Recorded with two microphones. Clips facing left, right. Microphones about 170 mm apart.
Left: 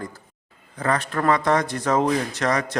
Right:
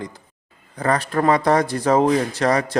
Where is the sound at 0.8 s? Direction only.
35° right (ahead or behind).